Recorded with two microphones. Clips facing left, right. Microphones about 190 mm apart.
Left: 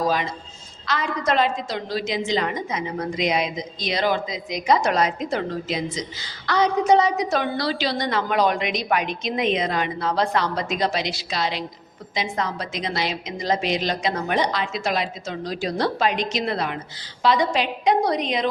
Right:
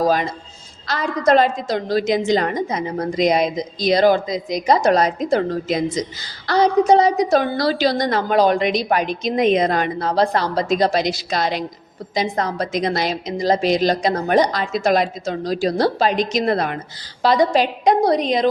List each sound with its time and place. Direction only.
0.9 s a woman's voice: 35° right (ahead or behind)
6.5 s a woman's voice: 35° right (ahead or behind)